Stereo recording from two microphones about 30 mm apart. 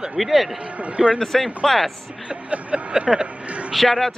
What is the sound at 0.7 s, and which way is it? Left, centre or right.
Speech, right.